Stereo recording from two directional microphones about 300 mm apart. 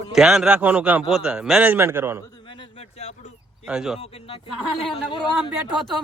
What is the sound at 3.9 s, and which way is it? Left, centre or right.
Speech, centre.